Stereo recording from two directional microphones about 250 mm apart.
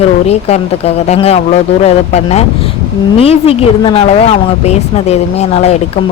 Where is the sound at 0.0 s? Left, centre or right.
Left.